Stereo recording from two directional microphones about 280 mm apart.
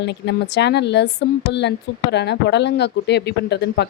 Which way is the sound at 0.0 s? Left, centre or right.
Left.